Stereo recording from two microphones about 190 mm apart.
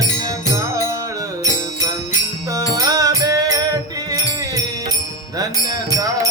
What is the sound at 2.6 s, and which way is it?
Music, 20° right (ahead or behind).